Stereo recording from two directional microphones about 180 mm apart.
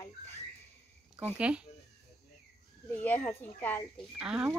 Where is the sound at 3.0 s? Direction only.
10° left (ahead or behind).